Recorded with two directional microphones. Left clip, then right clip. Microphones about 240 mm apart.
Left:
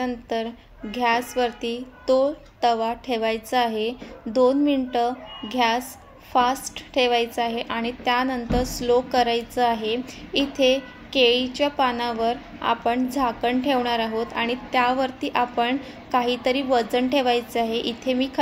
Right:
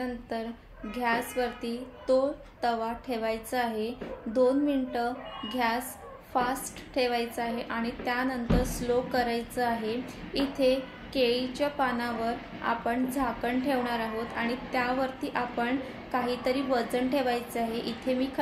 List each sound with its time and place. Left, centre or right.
0.0 s a woman's voice: left